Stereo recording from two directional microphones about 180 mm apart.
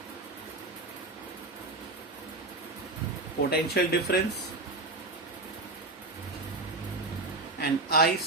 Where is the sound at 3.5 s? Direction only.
60° left (ahead or behind).